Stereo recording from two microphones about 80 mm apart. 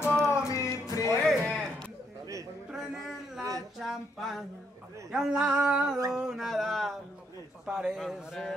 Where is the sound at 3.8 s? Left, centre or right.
Centre.